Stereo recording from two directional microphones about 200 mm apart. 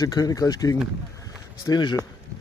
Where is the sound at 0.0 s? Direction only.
15° left (ahead or behind).